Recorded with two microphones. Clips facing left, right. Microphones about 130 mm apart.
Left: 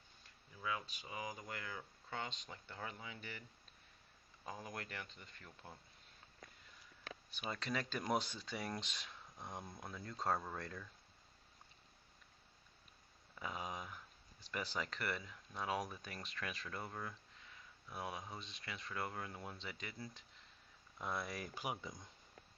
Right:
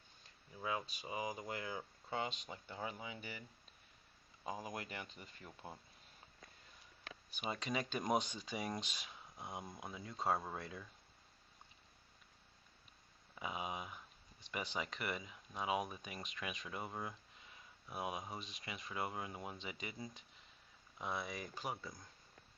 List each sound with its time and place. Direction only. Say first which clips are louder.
0.6 s speech: right 2 dB; 25° right (ahead or behind); by 3.4 s 10° right (ahead or behind)
4.4 s speech: right 3 dB; 20° right (ahead or behind)
7.4 s speech: right 2 dB; 15° right (ahead or behind)
8.8 s speech: right 1 dB; 5° right (ahead or behind)
13.3 s speech: right 2 dB; 10° right (ahead or behind)
21.0 s speech: even; centre (ahead or behind); by 22.1 s 20° left (ahead or behind)